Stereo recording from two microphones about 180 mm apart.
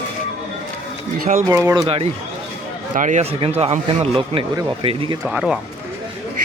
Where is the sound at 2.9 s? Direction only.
45° right (ahead or behind).